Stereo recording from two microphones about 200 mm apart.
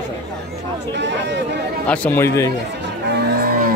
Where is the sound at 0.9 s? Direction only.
60° right (ahead or behind).